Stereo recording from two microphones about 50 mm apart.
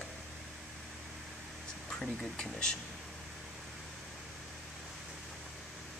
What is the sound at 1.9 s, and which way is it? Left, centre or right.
Speech, centre.